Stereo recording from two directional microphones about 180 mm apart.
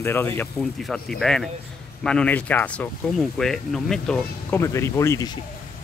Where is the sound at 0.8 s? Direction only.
Centre (ahead or behind).